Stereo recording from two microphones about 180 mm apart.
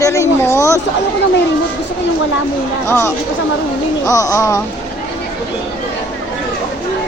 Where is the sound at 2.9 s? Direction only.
10° left (ahead or behind).